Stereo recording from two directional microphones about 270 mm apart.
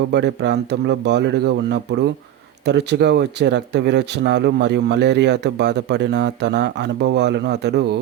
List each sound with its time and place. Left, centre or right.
0.1 s speech: right